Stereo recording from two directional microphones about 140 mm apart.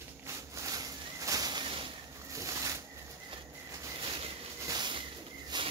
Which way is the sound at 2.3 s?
25° right (ahead or behind).